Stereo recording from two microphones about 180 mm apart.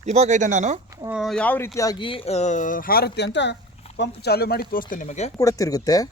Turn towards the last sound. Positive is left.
turn(degrees=20)  # may be behind; listen again after turning